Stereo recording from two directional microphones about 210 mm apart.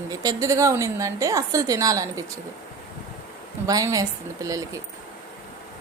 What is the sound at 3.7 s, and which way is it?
Speech, 15° right (ahead or behind).